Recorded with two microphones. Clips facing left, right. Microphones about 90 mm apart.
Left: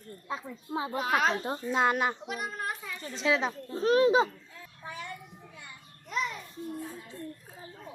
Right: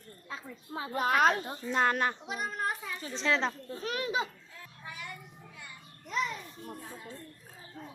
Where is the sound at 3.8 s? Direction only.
35° left (ahead or behind).